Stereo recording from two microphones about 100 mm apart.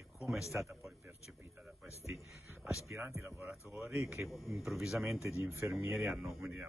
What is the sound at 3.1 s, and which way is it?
Speech, 25° right (ahead or behind).